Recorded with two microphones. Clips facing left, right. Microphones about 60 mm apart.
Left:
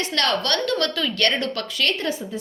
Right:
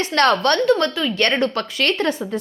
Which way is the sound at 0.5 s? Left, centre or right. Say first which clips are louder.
Right 6 dB; right.